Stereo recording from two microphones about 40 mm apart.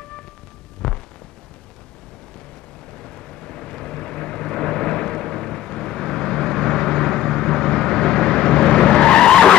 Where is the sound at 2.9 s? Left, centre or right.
Centre.